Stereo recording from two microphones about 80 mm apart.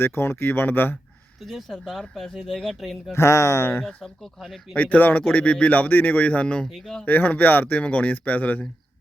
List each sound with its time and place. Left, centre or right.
0.0 s speech: left
1.4 s speech: centre
3.1 s speech: left
3.8 s speech: centre
4.7 s a man's voice: centre
6.7 s speech: centre
7.0 s speech: left